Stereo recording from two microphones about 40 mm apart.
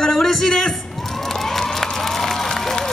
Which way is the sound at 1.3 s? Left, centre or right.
Centre.